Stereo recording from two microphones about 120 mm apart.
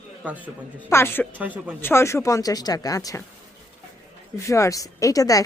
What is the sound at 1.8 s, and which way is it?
Speech, 20° left (ahead or behind).